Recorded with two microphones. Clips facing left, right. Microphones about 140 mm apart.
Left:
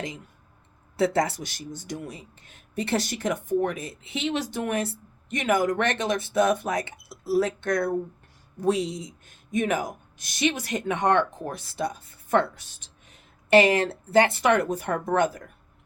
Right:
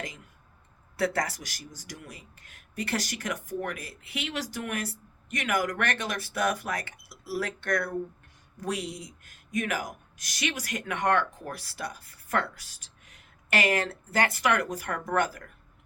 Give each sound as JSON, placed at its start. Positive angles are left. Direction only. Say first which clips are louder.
{"t": 0.9, "sound": "speech", "louder": "left 5 dB", "side_deg": 25}